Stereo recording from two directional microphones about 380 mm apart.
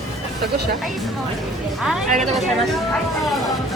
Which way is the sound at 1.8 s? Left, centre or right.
Centre.